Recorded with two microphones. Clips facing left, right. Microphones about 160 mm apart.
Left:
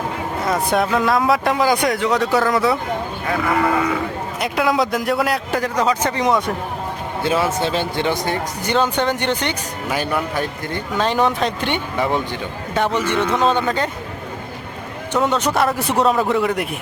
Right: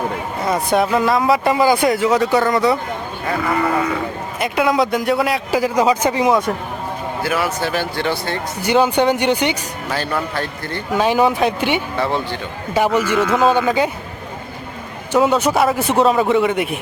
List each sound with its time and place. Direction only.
0.4 s speech: centre (ahead or behind)
4.4 s speech: centre (ahead or behind)
7.2 s speech: 25° left (ahead or behind)
8.6 s speech: 10° right (ahead or behind)
9.9 s speech: 15° left (ahead or behind)
10.9 s speech: 10° right (ahead or behind)
11.9 s speech: 15° left (ahead or behind)
12.7 s speech: 10° right (ahead or behind)
15.1 s speech: 5° right (ahead or behind)